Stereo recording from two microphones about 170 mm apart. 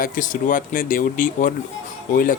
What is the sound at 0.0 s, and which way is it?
Speech, 50° left (ahead or behind).